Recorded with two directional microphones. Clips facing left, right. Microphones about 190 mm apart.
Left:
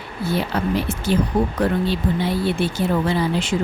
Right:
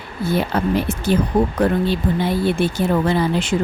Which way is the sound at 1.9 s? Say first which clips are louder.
Right 2 dB; 50° right (ahead or behind).